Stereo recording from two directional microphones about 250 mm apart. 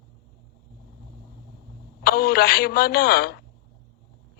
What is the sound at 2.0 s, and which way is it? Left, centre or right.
A man's voice, left.